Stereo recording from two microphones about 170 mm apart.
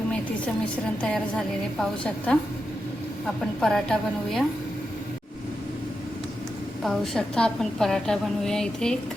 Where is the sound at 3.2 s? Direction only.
5° left (ahead or behind).